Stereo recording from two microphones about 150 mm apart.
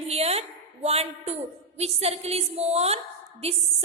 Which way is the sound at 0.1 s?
45° right (ahead or behind).